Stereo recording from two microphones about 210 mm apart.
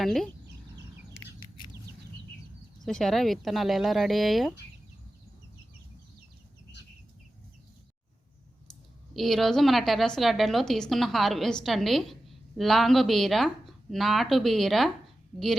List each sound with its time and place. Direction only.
0.0 s a woman's voice: centre (ahead or behind)
1.4 s patter: 20° left (ahead or behind)
2.8 s a woman's voice: centre (ahead or behind)
9.1 s a woman's voice: centre (ahead or behind)